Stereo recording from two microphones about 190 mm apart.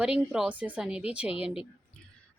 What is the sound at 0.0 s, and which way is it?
Speech, 5° right (ahead or behind).